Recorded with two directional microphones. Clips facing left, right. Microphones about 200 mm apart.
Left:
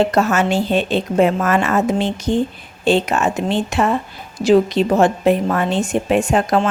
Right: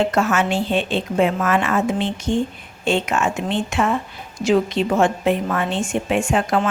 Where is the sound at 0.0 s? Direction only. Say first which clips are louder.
Left 3 dB; 40° left (ahead or behind).